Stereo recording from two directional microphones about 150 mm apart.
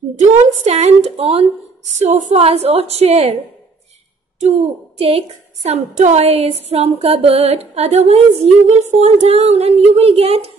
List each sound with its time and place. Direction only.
0.1 s a woman's voice: 50° right (ahead or behind)
4.4 s a woman's voice: 45° right (ahead or behind)